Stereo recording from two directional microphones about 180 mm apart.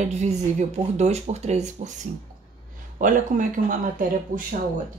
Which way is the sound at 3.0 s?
45° right (ahead or behind).